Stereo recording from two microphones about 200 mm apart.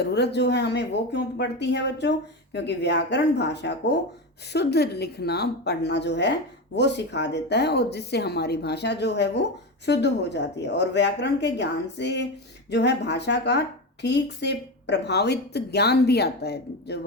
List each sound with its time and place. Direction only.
0.0 s a woman's voice: 55° left (ahead or behind)